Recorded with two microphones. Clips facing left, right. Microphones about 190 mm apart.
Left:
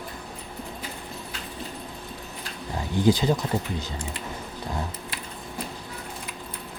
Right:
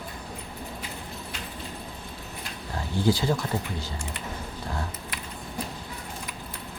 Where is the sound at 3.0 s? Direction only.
20° left (ahead or behind).